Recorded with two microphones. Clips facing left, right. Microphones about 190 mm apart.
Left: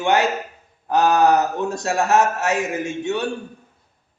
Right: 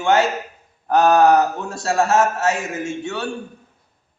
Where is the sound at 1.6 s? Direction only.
15° left (ahead or behind).